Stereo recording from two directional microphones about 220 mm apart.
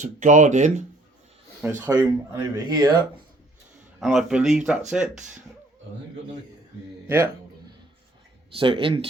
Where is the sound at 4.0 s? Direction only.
Centre (ahead or behind).